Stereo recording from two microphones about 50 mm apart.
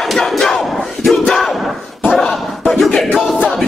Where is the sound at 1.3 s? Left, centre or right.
Centre.